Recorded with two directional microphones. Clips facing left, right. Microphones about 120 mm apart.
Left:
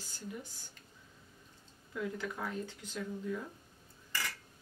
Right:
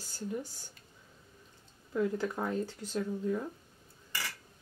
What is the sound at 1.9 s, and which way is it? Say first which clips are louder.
Speech: right 7 dB; 40° right (ahead or behind).